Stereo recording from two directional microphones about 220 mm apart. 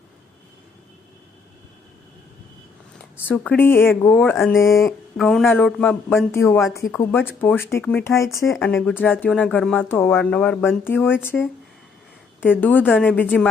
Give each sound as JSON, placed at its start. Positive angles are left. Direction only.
{"t": 3.0, "sound": "speech", "side_deg": 5}
{"t": 5.1, "sound": "a man's voice", "side_deg": 0}
{"t": 12.4, "sound": "speech", "side_deg": 10}